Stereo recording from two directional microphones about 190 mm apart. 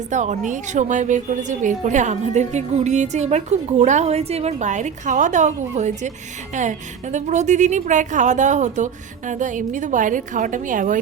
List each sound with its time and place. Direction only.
0.1 s a woman's voice: 40° right (ahead or behind)